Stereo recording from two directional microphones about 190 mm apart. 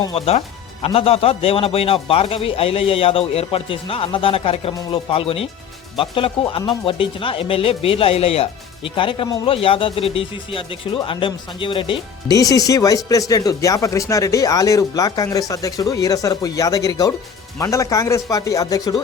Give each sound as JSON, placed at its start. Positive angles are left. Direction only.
{"t": 0.0, "sound": "speech", "side_deg": 30}